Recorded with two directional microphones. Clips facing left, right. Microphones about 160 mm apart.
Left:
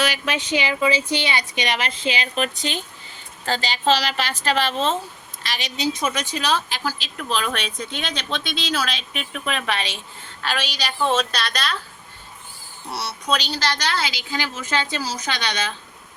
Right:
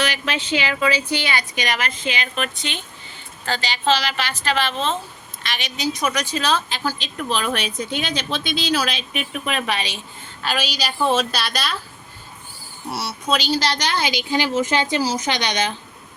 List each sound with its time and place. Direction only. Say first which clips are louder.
0.0 s a woman's voice: even; 10° left (ahead or behind)
7.2 s a woman's voice: right 2 dB; centre (ahead or behind)
12.9 s a woman's voice: right 1 dB; 5° right (ahead or behind)
13.6 s a woman's voice: right 2 dB; 15° right (ahead or behind)